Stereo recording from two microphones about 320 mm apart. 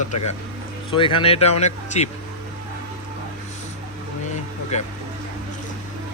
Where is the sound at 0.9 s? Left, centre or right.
Centre.